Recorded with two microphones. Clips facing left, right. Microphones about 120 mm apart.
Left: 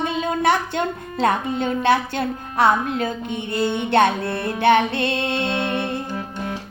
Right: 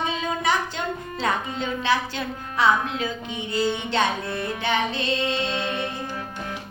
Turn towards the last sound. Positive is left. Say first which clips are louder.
# left 4 dB
turn(degrees=60)  # may be behind; listen again after turning